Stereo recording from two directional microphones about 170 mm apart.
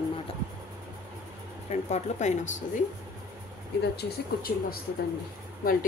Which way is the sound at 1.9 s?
45° left (ahead or behind).